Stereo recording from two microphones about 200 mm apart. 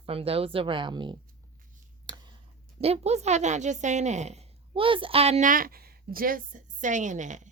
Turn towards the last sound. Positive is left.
turn(degrees=-35)  # may be behind; listen again after turning